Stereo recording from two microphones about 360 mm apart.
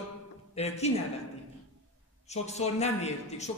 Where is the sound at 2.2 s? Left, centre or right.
Centre.